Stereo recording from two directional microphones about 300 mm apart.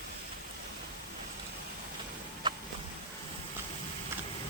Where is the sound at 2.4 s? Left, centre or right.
Centre.